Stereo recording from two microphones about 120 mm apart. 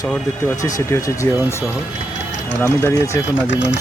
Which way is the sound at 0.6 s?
25° left (ahead or behind).